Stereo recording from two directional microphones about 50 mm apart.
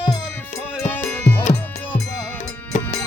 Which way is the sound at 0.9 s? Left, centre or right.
Left.